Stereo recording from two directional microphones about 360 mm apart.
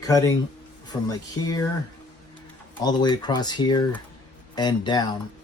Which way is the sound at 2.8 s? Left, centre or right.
Centre.